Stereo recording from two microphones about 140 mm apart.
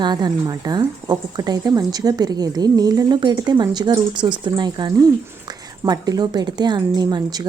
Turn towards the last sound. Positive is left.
turn(degrees=-30)  # may be behind; listen again after turning